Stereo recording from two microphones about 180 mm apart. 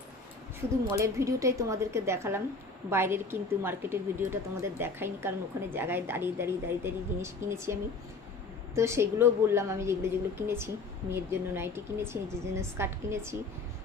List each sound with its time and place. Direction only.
0.9 s a woman's voice: 15° right (ahead or behind)